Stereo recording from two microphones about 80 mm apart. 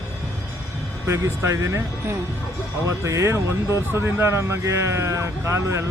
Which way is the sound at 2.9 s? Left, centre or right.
Right.